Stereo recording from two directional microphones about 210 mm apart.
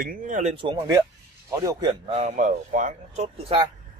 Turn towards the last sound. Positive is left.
turn(degrees=-30)  # may be behind; listen again after turning